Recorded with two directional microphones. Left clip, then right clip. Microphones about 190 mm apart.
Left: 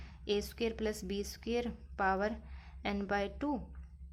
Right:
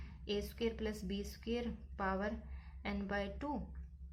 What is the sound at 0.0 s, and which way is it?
Speech, 45° left (ahead or behind).